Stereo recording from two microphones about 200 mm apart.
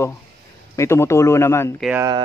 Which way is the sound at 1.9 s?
15° right (ahead or behind).